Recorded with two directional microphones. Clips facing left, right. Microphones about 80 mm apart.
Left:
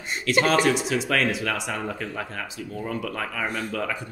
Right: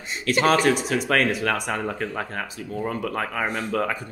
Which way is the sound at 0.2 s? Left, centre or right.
Right.